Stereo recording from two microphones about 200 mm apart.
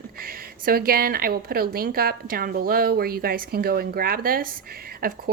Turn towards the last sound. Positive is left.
turn(degrees=-45)  # may be behind; listen again after turning